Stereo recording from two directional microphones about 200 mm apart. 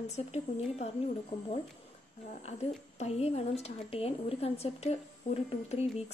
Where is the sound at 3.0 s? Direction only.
30° left (ahead or behind).